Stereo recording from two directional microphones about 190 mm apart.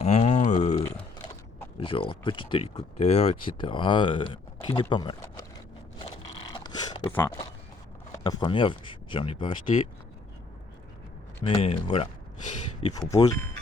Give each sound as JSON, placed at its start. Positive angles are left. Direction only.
{"t": 0.0, "sound": "a sound", "side_deg": 35}
{"t": 0.8, "sound": "typing", "side_deg": 15}
{"t": 1.8, "sound": "speech", "side_deg": 30}
{"t": 6.0, "sound": "a sound", "side_deg": 25}
{"t": 8.2, "sound": "speech", "side_deg": 25}
{"t": 11.4, "sound": "speech", "side_deg": 30}
{"t": 12.9, "sound": "speech", "side_deg": 20}